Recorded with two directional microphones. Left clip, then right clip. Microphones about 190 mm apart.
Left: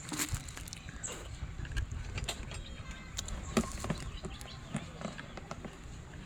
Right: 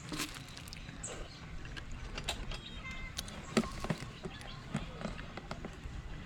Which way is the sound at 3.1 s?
5° left (ahead or behind).